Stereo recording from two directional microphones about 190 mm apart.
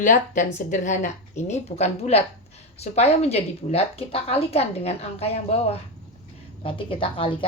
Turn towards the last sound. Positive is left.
turn(degrees=30)  # may be behind; listen again after turning